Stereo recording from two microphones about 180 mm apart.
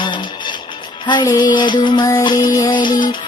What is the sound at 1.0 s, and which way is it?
Music, 20° left (ahead or behind).